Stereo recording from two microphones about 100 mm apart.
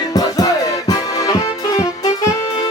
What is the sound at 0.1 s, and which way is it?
Music, 40° left (ahead or behind).